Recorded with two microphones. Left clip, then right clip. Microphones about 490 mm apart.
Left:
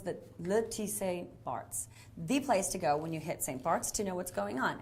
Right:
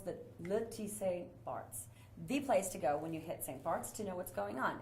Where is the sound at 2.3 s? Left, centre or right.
Left.